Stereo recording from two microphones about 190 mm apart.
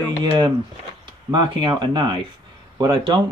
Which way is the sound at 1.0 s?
25° right (ahead or behind).